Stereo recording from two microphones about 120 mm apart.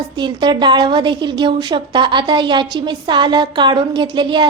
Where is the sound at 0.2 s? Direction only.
40° right (ahead or behind).